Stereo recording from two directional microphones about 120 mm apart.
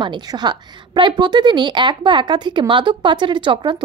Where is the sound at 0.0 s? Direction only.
35° right (ahead or behind).